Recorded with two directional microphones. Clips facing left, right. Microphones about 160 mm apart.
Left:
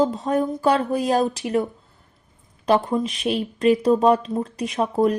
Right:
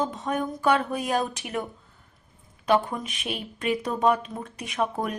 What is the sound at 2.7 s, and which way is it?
Speech, 35° left (ahead or behind).